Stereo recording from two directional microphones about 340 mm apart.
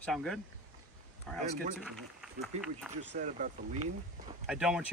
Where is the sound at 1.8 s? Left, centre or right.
Centre.